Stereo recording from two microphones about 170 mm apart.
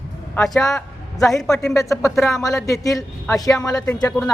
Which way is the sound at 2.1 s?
Centre (ahead or behind).